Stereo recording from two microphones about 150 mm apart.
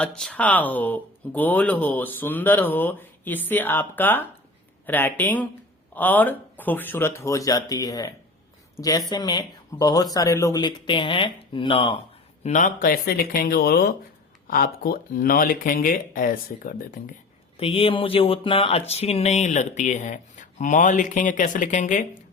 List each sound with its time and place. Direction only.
0.0 s speech: 10° left (ahead or behind); by 11.9 s 35° left (ahead or behind)
12.4 s speech: 55° left (ahead or behind); by 13.9 s 90° left
14.4 s speech: 75° left (ahead or behind)
17.6 s speech: 40° left (ahead or behind); by 22.0 s 55° left (ahead or behind)